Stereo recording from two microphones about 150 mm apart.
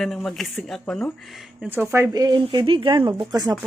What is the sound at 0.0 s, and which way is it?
A woman's voice, centre (ahead or behind).